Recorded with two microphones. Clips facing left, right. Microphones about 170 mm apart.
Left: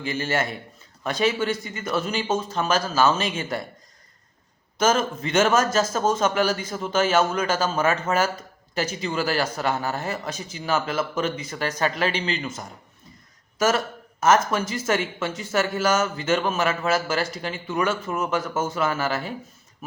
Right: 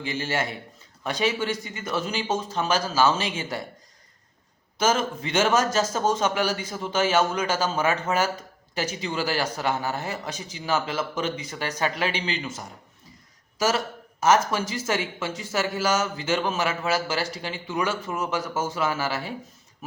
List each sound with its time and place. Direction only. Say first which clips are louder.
0.0 s a man's voice: left 2 dB; 15° right (ahead or behind)
4.9 s a man's voice: left 3 dB; 50° left (ahead or behind)
5.4 s a man's voice: left 2 dB; 15° right (ahead or behind)
13.6 s speech: left 2 dB; 55° left (ahead or behind)
14.2 s a man's voice: left 1 dB; 10° right (ahead or behind)
18.1 s speech: left 3 dB; 55° left (ahead or behind)
18.4 s a man's voice: left 2 dB; 10° right (ahead or behind)